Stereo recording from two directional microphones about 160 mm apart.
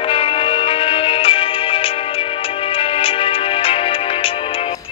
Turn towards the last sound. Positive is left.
turn(degrees=35)  # may be behind; listen again after turning